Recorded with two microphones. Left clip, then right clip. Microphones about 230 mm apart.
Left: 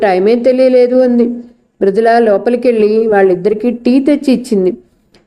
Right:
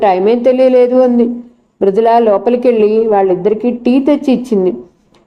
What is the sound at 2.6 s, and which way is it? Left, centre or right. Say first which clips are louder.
A woman's voice: even; centre.